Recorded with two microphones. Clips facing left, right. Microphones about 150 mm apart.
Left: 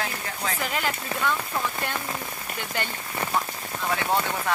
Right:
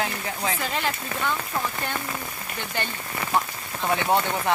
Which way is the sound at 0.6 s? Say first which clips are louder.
Right 1 dB; 5° left (ahead or behind).